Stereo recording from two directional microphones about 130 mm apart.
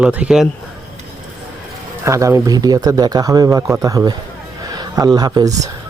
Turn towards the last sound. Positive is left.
turn(degrees=-30)  # may be behind; listen again after turning